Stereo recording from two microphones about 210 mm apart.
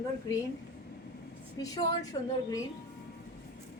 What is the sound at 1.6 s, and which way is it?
Speech, 20° left (ahead or behind).